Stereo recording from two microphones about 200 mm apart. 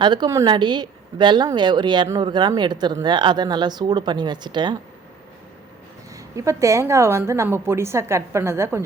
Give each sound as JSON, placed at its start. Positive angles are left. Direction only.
{"t": 0.0, "sound": "a woman's voice", "side_deg": -20}
{"t": 6.1, "sound": "a woman's voice", "side_deg": -15}